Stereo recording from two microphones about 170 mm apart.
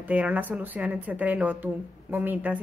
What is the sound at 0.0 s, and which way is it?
Speech, 10° right (ahead or behind).